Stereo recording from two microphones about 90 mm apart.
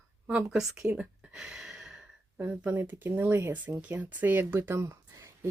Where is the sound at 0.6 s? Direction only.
5° right (ahead or behind).